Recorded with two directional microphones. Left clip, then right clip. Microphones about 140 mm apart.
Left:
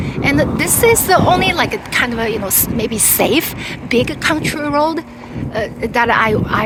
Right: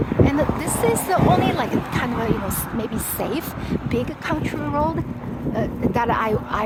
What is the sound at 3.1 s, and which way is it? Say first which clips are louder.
Speech: left 13 dB; 45° left (ahead or behind).